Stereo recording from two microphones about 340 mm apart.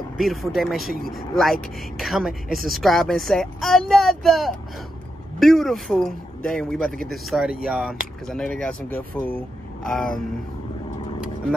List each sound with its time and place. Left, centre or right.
0.2 s speech: centre